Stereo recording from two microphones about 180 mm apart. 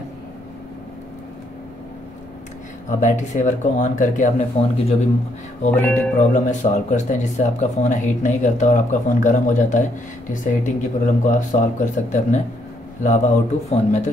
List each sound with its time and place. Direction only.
2.9 s speech: 45° left (ahead or behind)
5.7 s speech: 10° left (ahead or behind)
6.1 s speech: 45° left (ahead or behind)